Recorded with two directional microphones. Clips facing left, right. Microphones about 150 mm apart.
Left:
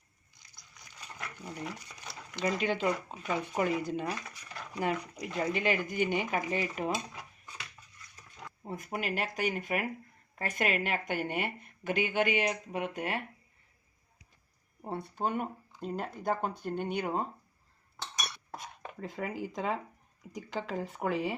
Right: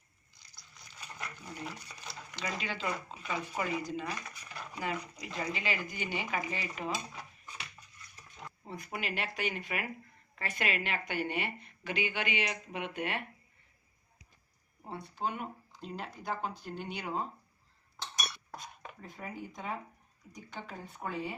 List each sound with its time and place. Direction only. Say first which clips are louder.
2.4 s a woman's voice: left 8 dB; 50° left (ahead or behind)
8.6 s a woman's voice: left 4 dB; 45° left (ahead or behind)
14.8 s a woman's voice: left 4 dB; 50° left (ahead or behind)
19.0 s speech: left 7 dB; 90° left